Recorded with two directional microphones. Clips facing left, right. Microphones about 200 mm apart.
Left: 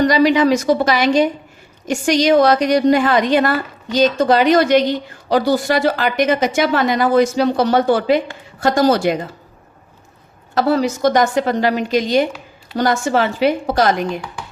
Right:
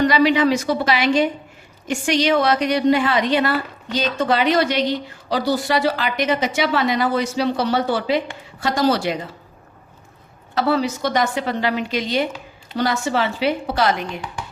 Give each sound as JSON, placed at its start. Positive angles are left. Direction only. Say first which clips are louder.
{"t": 0.0, "sound": "a woman's voice", "louder": "left 3 dB", "side_deg": 40}
{"t": 10.5, "sound": "a woman's voice", "louder": "left 3 dB", "side_deg": 45}